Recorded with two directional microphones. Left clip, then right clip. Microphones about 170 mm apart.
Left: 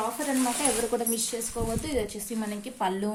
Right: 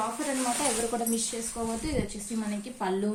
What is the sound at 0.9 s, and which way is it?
Speech, 35° left (ahead or behind).